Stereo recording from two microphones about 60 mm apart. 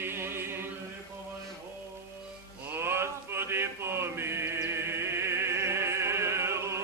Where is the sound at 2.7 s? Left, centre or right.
Right.